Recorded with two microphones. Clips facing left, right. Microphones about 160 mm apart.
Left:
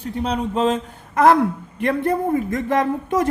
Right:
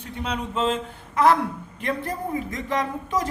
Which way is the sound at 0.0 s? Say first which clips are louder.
Left 7 dB; 35° left (ahead or behind).